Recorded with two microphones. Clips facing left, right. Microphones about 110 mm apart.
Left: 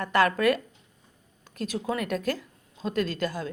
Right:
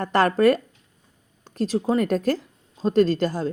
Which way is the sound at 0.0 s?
35° right (ahead or behind).